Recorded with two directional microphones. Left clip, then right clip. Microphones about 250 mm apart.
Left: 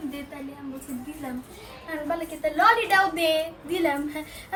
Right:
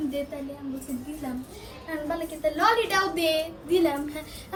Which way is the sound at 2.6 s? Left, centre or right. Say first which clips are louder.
Left 4 dB; left.